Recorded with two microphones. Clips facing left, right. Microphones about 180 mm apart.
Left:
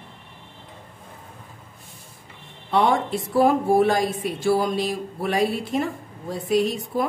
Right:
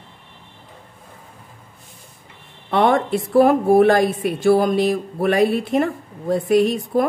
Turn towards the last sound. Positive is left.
turn(degrees=-55)  # may be behind; listen again after turning